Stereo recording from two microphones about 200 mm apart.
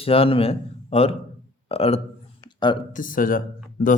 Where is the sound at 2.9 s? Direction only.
45° left (ahead or behind).